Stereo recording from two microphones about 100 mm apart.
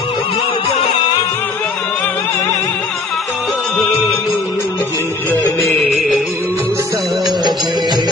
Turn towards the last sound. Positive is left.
turn(degrees=-45)  # may be behind; listen again after turning